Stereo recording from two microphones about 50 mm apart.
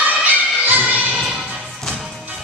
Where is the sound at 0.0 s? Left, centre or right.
Right.